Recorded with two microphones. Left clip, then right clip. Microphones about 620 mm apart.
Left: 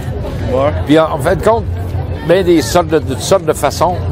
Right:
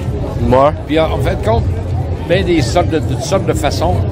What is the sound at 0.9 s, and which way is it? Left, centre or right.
Speech, left.